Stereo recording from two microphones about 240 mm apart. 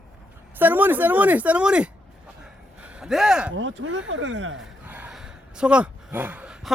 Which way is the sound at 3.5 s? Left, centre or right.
Right.